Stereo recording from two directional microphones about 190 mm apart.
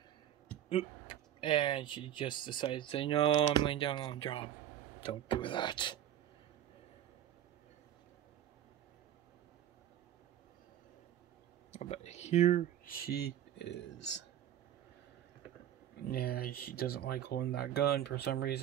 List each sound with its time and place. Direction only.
0.7 s speech: 30° left (ahead or behind)
11.7 s speech: 35° left (ahead or behind); by 14.2 s 65° left (ahead or behind)
16.1 s speech: 55° left (ahead or behind)